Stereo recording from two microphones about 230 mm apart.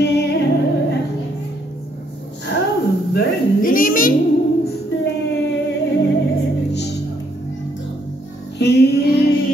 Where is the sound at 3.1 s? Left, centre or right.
Left.